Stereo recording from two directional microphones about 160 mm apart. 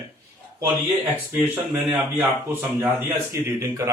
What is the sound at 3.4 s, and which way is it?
Speech, 15° right (ahead or behind).